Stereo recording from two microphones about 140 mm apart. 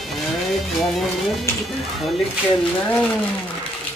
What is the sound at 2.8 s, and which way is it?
Speech, 10° left (ahead or behind).